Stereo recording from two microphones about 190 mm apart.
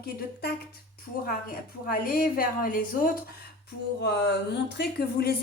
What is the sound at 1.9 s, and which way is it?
Speech, 50° left (ahead or behind).